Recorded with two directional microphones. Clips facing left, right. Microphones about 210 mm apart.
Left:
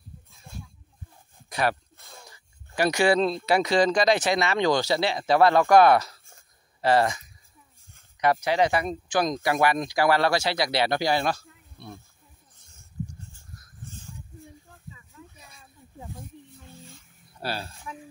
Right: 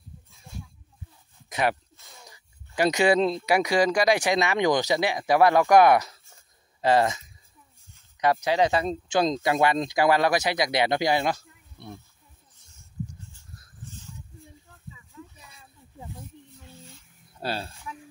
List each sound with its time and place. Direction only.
1.5 s speech: 20° right (ahead or behind)
2.0 s a sound: 55° left (ahead or behind)
2.2 s speech: 20° right (ahead or behind)
17.4 s speech: 25° right (ahead or behind)